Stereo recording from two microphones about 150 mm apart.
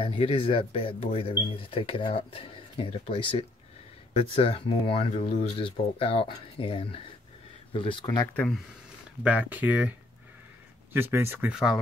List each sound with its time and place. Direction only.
0.0 s speech: 40° left (ahead or behind)
9.2 s speech: 10° right (ahead or behind)
11.5 s speech: centre (ahead or behind)